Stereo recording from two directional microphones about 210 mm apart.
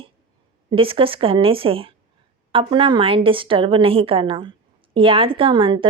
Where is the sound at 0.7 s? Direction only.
25° right (ahead or behind).